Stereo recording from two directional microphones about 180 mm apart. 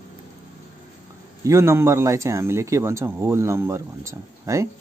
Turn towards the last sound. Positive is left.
turn(degrees=-15)  # may be behind; listen again after turning